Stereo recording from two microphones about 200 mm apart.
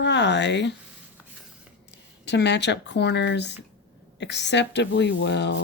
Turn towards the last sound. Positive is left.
turn(degrees=60)  # may be behind; listen again after turning